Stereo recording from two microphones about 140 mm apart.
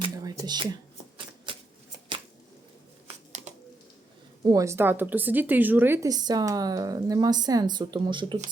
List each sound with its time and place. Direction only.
0.0 s a sound: 25° right (ahead or behind)
4.4 s speech: 25° right (ahead or behind)
6.1 s a woman's voice: 30° right (ahead or behind)